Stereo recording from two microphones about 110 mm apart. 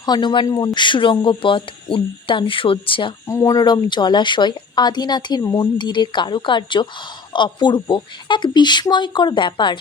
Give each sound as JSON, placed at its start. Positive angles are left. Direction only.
{"t": 0.0, "sound": "speech", "side_deg": 40}
{"t": 3.2, "sound": "speech", "side_deg": 30}